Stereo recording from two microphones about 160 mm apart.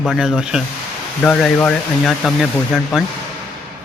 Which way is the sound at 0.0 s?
Centre (ahead or behind).